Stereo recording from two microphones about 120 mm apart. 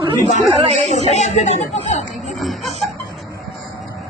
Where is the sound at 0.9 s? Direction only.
65° left (ahead or behind).